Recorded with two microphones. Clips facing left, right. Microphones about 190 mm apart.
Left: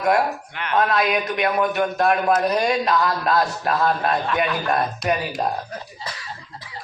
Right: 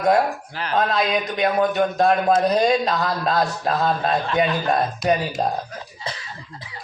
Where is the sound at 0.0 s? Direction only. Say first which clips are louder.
Right 1 dB; 30° right (ahead or behind).